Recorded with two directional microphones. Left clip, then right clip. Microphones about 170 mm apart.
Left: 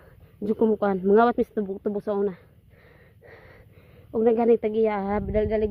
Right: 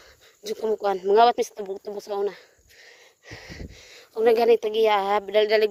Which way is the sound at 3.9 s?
25° right (ahead or behind).